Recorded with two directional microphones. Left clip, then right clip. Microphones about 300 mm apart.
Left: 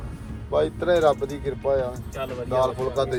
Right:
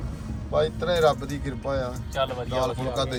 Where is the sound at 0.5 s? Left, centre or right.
Left.